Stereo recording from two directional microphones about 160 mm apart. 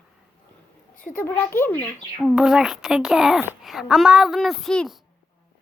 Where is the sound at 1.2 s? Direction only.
15° left (ahead or behind).